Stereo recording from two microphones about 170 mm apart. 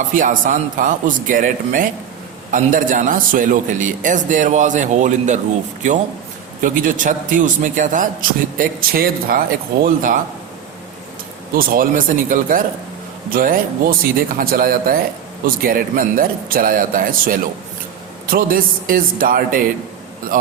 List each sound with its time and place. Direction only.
0.1 s a man's voice: 50° right (ahead or behind)
6.6 s a man's voice: 50° right (ahead or behind)
11.5 s a man's voice: 55° right (ahead or behind)